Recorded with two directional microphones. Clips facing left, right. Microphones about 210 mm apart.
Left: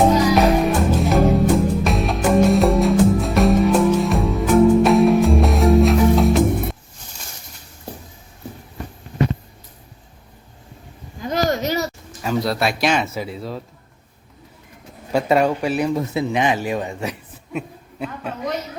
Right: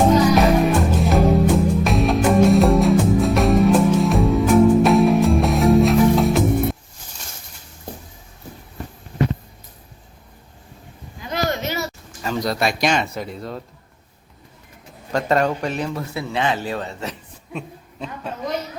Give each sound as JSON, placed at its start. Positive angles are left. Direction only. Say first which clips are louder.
{"t": 0.3, "sound": "music", "louder": "even", "side_deg": 0}
{"t": 11.2, "sound": "a sound", "louder": "left 3 dB", "side_deg": 40}
{"t": 12.2, "sound": "speech", "louder": "left 1 dB", "side_deg": 5}
{"t": 15.1, "sound": "a man's voice", "louder": "left 2 dB", "side_deg": 10}